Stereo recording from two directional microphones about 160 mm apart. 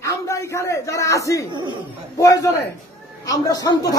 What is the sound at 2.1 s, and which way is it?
A man's voice, 20° left (ahead or behind).